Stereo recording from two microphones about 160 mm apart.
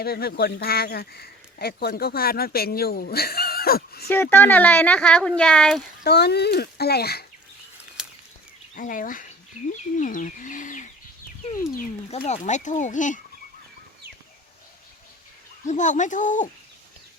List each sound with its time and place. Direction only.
0.0 s speech: 75° left (ahead or behind)
4.1 s speech: 10° left (ahead or behind)
6.0 s speech: 90° left
8.0 s a sound: 5° right (ahead or behind)
8.7 s speech: 55° left (ahead or behind)
12.1 s speech: 40° left (ahead or behind)
15.6 s speech: 50° left (ahead or behind)